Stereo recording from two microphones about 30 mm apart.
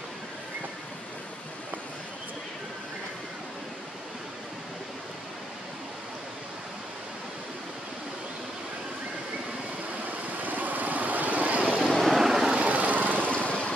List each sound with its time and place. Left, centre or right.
10.0 s vehicle: right
11.8 s vehicle: centre
12.2 s vehicle: centre
12.5 s vehicle: right
13.3 s vehicle: left